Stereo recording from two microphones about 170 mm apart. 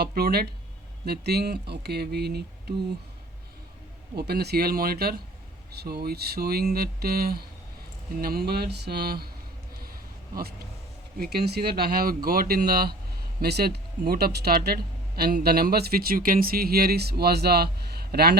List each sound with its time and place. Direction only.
0.0 s speech: 70° right (ahead or behind)
4.1 s speech: 70° right (ahead or behind)
11.2 s speech: 70° right (ahead or behind)